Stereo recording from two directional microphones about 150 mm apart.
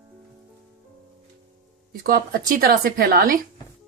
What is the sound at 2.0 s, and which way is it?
Speech, 80° right.